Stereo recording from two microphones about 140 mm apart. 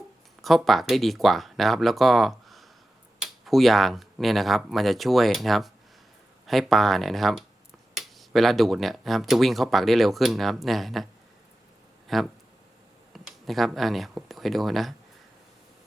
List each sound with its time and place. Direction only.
0.4 s speech: centre (ahead or behind)